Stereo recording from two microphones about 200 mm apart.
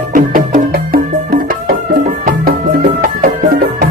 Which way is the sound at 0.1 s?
45° right (ahead or behind).